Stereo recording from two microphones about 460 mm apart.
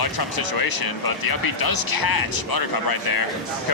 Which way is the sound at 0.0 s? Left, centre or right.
Left.